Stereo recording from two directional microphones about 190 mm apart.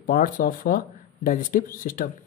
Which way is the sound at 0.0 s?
45° left (ahead or behind).